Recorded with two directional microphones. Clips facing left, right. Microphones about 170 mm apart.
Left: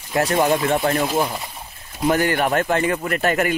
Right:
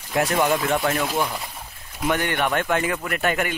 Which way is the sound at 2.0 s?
40° left (ahead or behind).